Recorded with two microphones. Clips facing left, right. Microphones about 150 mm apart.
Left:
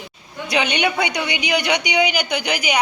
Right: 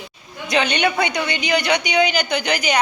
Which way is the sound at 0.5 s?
15° left (ahead or behind).